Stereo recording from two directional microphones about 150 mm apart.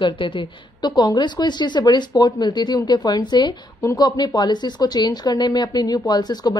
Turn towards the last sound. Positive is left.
turn(degrees=25)  # may be behind; listen again after turning